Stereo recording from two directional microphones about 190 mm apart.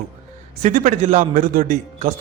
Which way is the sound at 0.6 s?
40° right (ahead or behind).